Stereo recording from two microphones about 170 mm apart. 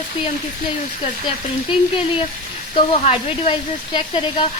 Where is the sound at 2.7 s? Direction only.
35° left (ahead or behind).